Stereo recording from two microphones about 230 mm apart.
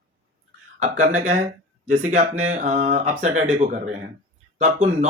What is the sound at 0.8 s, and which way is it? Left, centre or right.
Speech, right.